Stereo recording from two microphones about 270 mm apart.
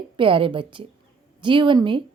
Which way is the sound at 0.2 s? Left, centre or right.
Centre.